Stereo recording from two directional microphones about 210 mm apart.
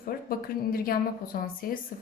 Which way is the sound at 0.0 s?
45° left (ahead or behind).